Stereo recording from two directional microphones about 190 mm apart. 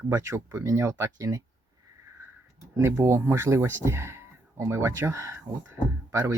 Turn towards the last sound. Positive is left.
turn(degrees=-15)  # may be behind; listen again after turning